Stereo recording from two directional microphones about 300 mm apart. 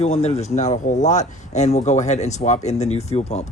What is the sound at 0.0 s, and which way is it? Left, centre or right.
Speech, left.